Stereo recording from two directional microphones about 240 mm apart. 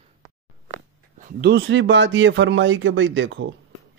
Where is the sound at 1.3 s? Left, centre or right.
Right.